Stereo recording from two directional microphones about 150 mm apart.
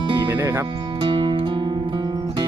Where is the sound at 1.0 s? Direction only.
35° right (ahead or behind).